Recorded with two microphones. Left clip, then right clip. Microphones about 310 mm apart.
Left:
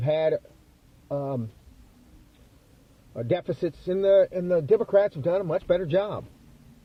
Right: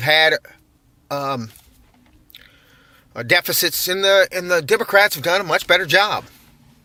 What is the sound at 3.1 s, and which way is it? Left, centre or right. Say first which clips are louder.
Speech: right 10 dB; right.